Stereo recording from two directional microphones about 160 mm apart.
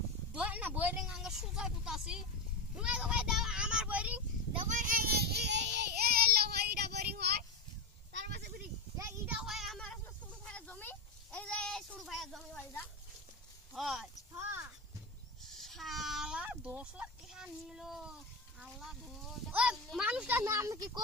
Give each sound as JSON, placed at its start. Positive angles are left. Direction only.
{"t": 0.3, "sound": "vehicle", "side_deg": -10}
{"t": 2.7, "sound": "a child's voice", "side_deg": -5}
{"t": 4.7, "sound": "child singing", "side_deg": -55}
{"t": 8.1, "sound": "a sound", "side_deg": -90}
{"t": 9.0, "sound": "child singing", "side_deg": -20}
{"t": 9.3, "sound": "child singing", "side_deg": -5}
{"t": 10.4, "sound": "a sound", "side_deg": 10}
{"t": 13.7, "sound": "a child's voice", "side_deg": 0}
{"t": 14.3, "sound": "a sound", "side_deg": -20}
{"t": 15.5, "sound": "speech", "side_deg": 0}